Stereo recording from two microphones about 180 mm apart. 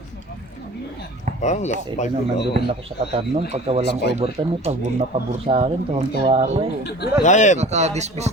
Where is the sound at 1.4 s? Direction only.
40° left (ahead or behind).